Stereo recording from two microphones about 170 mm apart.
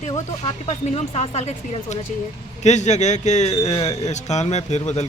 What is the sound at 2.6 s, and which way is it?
A woman's voice, 40° left (ahead or behind).